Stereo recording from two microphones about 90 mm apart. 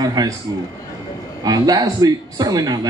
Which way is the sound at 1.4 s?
45° right (ahead or behind).